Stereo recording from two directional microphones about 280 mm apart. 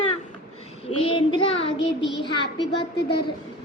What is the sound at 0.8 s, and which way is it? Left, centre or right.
Child singing, centre.